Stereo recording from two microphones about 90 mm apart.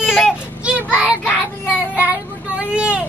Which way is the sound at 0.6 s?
15° right (ahead or behind).